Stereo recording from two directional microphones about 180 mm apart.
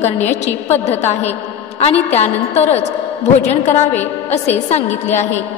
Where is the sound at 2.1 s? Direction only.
35° left (ahead or behind).